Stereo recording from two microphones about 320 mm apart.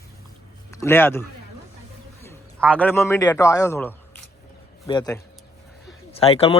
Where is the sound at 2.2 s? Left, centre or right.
Centre.